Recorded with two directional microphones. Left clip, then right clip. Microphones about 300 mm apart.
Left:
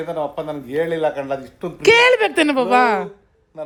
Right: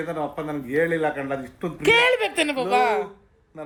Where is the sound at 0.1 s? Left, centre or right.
Centre.